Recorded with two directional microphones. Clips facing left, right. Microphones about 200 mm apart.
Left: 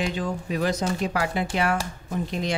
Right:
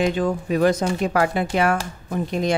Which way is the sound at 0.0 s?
55° right (ahead or behind).